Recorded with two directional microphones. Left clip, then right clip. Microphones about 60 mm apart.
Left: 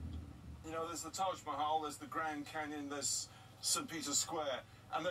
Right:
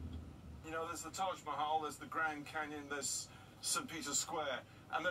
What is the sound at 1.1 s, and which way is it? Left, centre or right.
Speech, right.